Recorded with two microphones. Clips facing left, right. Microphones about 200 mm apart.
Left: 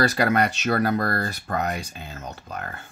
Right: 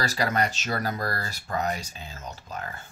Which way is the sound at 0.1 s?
60° left (ahead or behind).